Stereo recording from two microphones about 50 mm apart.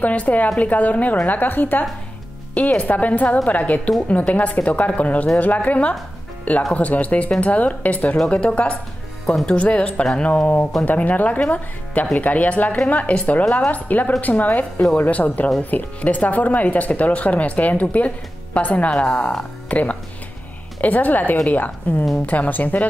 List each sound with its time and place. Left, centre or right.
0.0 s speech: left
9.2 s speech: centre
9.5 s speech: left